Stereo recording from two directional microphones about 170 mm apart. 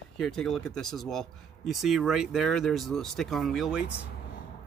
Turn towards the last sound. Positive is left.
turn(degrees=-5)  # may be behind; listen again after turning